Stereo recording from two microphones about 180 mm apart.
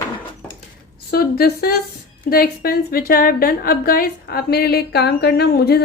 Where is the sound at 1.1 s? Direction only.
60° left (ahead or behind).